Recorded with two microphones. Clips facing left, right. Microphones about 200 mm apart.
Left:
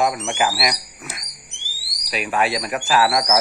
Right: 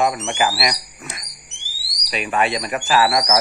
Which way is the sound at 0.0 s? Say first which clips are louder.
Right 1 dB; centre (ahead or behind).